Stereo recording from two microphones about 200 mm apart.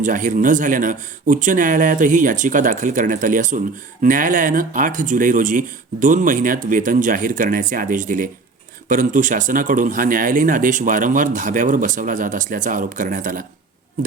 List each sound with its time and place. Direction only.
0.0 s speech: 40° right (ahead or behind)